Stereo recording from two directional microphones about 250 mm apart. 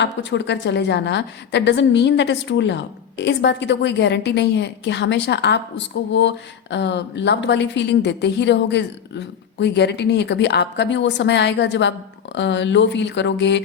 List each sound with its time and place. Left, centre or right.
0.0 s a woman's voice: left